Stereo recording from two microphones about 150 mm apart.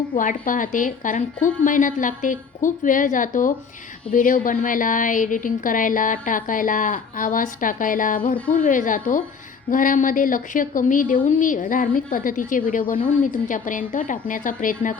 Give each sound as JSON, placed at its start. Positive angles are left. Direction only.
{"t": 0.2, "sound": "speech", "side_deg": 60}